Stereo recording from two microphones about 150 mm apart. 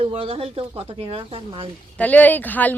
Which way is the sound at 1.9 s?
10° left (ahead or behind).